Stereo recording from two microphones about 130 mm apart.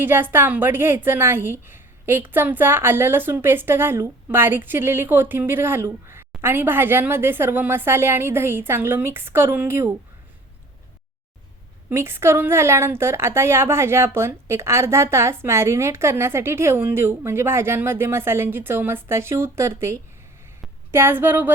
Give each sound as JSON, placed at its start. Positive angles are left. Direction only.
{"t": 0.0, "sound": "a woman's voice", "side_deg": -15}
{"t": 11.9, "sound": "a woman's voice", "side_deg": -20}